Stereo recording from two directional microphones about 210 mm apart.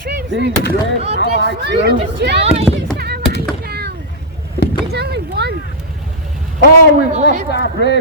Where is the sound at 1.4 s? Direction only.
50° right (ahead or behind).